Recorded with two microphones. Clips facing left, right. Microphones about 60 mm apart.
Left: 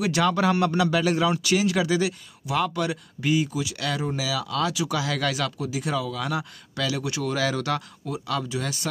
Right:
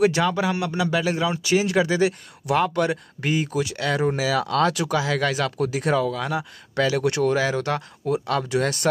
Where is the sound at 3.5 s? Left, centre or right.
Right.